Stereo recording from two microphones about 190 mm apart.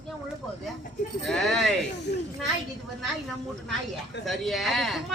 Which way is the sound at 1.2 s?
Centre (ahead or behind).